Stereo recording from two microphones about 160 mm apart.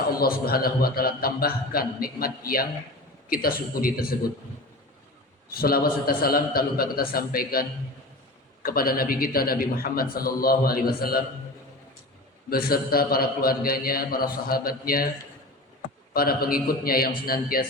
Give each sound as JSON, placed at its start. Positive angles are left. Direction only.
{"t": 0.2, "sound": "a man's voice", "side_deg": 70}
{"t": 5.5, "sound": "a man's voice", "side_deg": 70}
{"t": 12.5, "sound": "a man's voice", "side_deg": 70}
{"t": 16.1, "sound": "a man's voice", "side_deg": 70}